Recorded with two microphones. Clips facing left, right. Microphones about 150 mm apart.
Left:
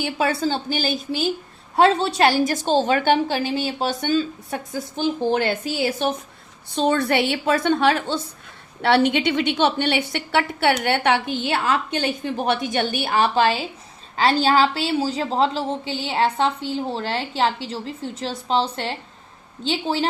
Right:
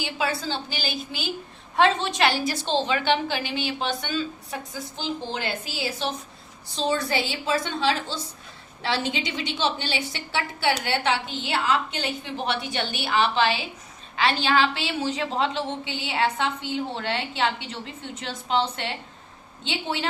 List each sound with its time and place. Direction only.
0.0 s a woman's voice: 50° left (ahead or behind)
1.7 s a woman's voice: 35° left (ahead or behind)
3.3 s a woman's voice: 35° left (ahead or behind)
4.9 s a woman's voice: 55° left (ahead or behind); by 20.1 s 35° left (ahead or behind)